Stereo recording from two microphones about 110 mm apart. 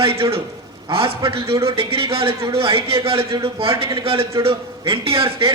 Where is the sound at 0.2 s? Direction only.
60° right (ahead or behind).